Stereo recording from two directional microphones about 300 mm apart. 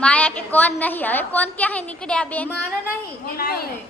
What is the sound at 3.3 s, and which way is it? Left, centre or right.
Speech, left.